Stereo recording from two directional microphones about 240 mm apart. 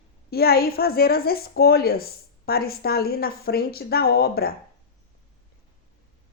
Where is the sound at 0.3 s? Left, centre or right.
Left.